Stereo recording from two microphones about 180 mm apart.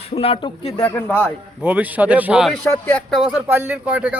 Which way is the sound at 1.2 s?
10° right (ahead or behind).